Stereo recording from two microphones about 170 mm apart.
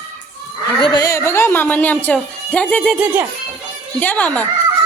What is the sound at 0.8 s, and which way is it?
A woman's voice, 25° left (ahead or behind).